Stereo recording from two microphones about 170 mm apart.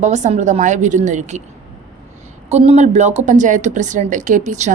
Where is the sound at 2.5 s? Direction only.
40° right (ahead or behind).